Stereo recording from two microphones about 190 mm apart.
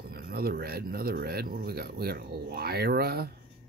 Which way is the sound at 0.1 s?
55° right (ahead or behind).